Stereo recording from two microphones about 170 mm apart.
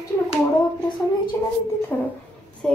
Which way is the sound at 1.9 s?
10° left (ahead or behind).